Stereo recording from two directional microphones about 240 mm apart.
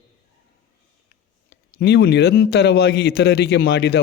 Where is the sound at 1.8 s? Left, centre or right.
Left.